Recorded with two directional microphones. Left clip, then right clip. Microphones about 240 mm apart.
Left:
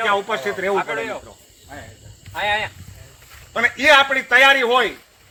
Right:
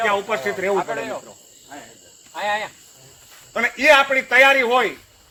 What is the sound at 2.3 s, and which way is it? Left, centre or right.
Speech, left.